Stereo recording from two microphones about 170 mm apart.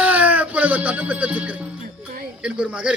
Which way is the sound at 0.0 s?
10° right (ahead or behind).